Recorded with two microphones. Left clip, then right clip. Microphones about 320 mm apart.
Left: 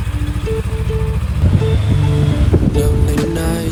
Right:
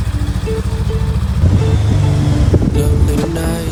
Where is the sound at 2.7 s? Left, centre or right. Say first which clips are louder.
Even; centre.